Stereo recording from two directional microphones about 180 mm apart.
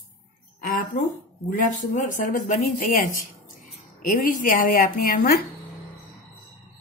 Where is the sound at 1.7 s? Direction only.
50° left (ahead or behind).